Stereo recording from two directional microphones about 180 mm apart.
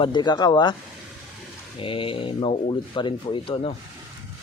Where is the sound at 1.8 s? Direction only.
30° left (ahead or behind).